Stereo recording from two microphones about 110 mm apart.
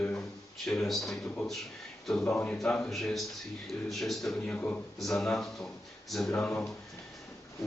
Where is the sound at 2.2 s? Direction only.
15° left (ahead or behind).